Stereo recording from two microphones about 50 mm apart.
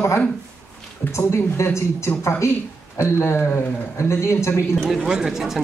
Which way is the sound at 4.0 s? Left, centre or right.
Left.